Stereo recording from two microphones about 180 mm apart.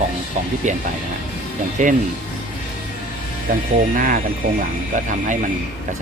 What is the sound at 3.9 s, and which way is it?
Speech, 50° right (ahead or behind).